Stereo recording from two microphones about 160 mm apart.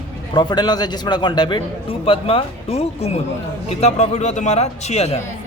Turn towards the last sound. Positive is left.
turn(degrees=40)  # may be behind; listen again after turning